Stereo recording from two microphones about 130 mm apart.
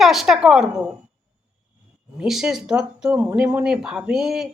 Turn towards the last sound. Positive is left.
turn(degrees=-5)  # may be behind; listen again after turning